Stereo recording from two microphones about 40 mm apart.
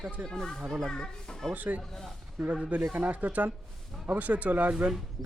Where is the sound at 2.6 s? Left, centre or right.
Right.